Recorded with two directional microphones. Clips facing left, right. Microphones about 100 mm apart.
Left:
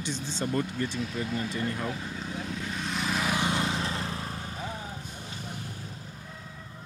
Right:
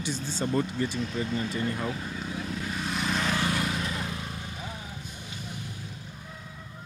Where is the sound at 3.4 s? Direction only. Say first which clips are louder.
Even; 20° left (ahead or behind).